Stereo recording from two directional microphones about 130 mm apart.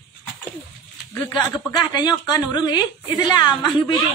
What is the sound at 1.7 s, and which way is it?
A woman's voice, 35° left (ahead or behind).